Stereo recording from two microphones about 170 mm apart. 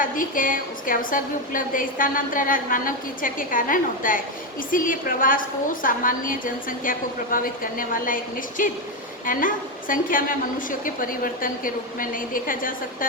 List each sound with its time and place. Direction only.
0.0 s a woman's voice: 55° left (ahead or behind)